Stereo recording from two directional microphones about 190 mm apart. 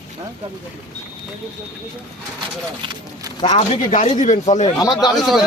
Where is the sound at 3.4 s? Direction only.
35° left (ahead or behind).